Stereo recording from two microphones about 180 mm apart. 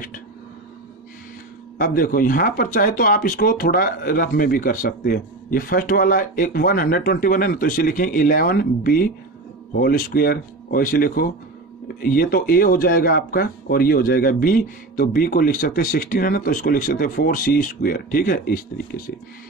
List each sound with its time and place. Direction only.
1.8 s speech: 55° left (ahead or behind)